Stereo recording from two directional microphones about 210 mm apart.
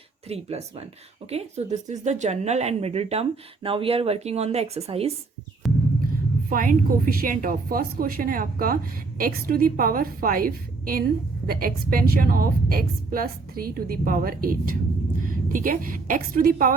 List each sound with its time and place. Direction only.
0.3 s speech: 30° right (ahead or behind)
5.6 s a sound: centre (ahead or behind)
6.5 s a woman's voice: 40° right (ahead or behind)